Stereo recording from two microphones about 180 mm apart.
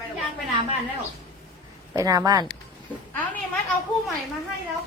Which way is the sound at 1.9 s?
20° right (ahead or behind).